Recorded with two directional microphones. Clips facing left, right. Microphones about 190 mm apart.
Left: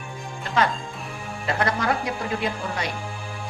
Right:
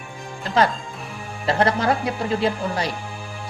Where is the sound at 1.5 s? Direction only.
30° right (ahead or behind).